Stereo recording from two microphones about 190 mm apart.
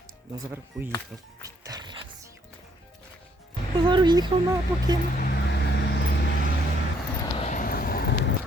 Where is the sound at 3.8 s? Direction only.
25° right (ahead or behind).